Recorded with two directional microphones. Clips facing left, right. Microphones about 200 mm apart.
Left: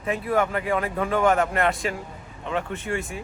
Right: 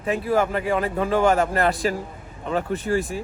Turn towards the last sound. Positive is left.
turn(degrees=-35)  # may be behind; listen again after turning